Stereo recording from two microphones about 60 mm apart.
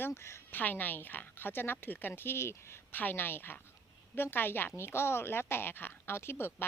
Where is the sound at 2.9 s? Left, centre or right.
Left.